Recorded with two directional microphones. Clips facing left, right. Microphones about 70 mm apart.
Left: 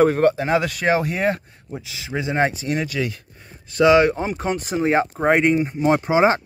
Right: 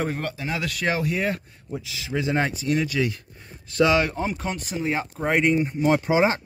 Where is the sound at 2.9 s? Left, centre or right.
Centre.